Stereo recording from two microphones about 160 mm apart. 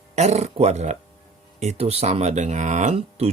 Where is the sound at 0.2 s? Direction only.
45° right (ahead or behind).